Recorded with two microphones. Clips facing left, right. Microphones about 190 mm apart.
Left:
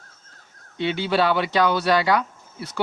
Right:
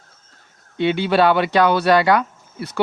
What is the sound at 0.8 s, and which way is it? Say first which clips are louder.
Speech: right 5 dB; 60° right (ahead or behind).